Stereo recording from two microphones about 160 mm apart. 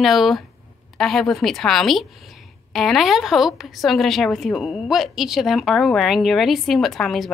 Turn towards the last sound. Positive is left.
turn(degrees=0)  # may be behind; listen again after turning